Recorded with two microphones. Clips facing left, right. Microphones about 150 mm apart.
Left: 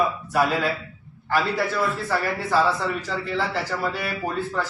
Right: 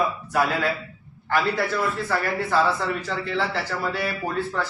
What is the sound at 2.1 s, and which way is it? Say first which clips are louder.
Speech: even; 5° left (ahead or behind).